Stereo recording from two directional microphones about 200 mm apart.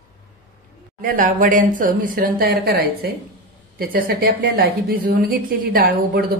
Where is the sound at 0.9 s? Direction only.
45° right (ahead or behind).